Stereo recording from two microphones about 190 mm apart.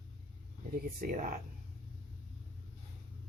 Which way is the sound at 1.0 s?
45° right (ahead or behind).